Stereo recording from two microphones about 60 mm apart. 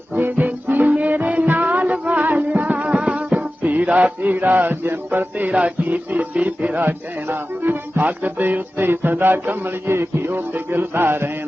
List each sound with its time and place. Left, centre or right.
0.1 s music: right
6.8 s music: right